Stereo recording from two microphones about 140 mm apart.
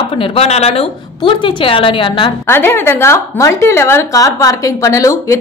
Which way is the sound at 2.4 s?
15° left (ahead or behind).